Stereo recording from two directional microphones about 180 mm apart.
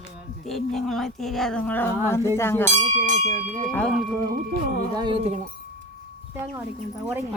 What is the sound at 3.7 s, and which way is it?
Speech, 5° left (ahead or behind).